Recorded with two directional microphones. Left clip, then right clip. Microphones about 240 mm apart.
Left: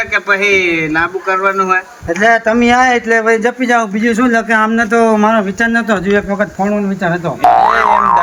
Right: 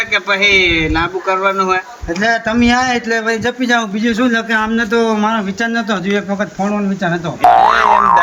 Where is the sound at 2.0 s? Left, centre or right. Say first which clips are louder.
Left 5 dB; centre.